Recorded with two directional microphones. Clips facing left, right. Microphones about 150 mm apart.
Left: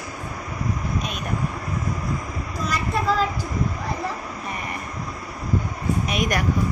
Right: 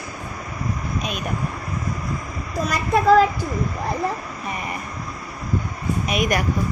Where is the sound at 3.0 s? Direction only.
60° right (ahead or behind).